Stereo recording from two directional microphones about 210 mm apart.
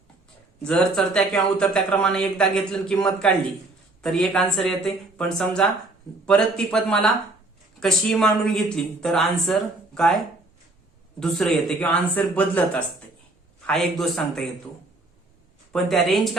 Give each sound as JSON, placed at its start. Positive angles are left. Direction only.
{"t": 0.6, "sound": "a man's voice", "side_deg": 5}
{"t": 11.2, "sound": "a man's voice", "side_deg": 5}
{"t": 15.7, "sound": "a man's voice", "side_deg": 0}